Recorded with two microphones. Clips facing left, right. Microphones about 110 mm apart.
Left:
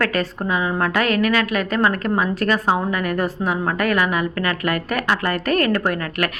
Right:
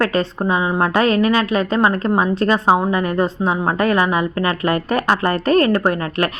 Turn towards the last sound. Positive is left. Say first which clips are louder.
# right 3 dB
turn(degrees=-30)  # may be behind; listen again after turning